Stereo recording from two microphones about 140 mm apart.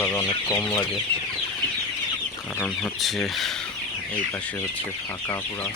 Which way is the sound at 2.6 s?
5° left (ahead or behind).